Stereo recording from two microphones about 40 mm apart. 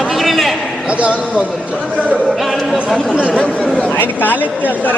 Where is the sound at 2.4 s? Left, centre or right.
Centre.